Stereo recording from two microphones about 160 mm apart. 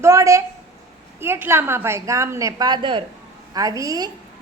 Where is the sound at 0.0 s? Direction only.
20° right (ahead or behind).